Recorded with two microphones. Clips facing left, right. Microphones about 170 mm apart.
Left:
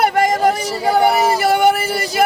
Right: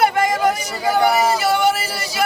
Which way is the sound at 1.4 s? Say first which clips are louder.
Left 4 dB; 55° left (ahead or behind).